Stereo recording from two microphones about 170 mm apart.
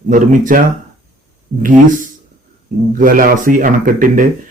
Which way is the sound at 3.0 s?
55° right (ahead or behind).